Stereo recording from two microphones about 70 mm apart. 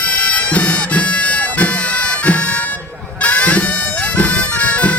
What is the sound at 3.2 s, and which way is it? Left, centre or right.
Bagpipes, centre.